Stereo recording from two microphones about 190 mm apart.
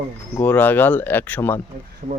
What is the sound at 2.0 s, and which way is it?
Speech, 35° right (ahead or behind).